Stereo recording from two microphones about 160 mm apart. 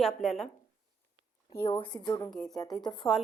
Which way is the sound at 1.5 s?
15° left (ahead or behind).